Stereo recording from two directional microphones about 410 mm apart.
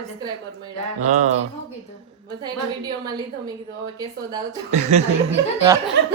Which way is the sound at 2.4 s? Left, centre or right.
Centre.